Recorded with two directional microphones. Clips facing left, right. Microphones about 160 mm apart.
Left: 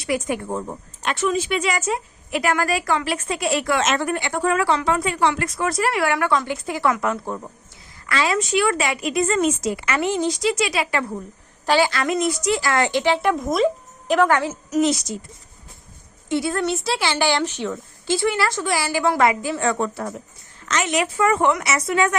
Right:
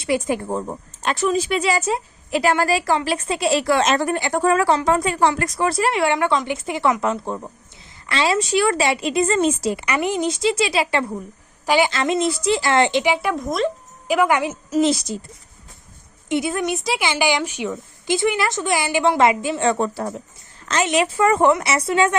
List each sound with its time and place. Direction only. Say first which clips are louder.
0.0 s a woman's voice: right 3 dB; 25° right (ahead or behind)
9.8 s a woman's voice: left 1 dB; 15° right (ahead or behind)
11.6 s a woman's voice: right 1 dB; 15° right (ahead or behind)
13.2 s speech: left 2 dB; centre (ahead or behind)
14.1 s a woman's voice: even; 10° right (ahead or behind)
14.7 s a woman's voice: right 1 dB; 30° right (ahead or behind)
16.3 s a woman's voice: even; 20° right (ahead or behind)